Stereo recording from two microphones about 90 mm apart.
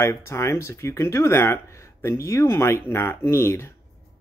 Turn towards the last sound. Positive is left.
turn(degrees=30)  # may be behind; listen again after turning